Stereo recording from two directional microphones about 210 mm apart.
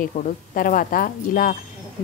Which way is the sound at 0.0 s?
40° left (ahead or behind).